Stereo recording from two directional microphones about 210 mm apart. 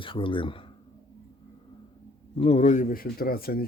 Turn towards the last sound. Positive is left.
turn(degrees=45)  # may be behind; listen again after turning